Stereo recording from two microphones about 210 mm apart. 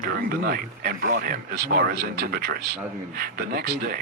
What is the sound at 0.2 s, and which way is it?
Speech, 45° right (ahead or behind).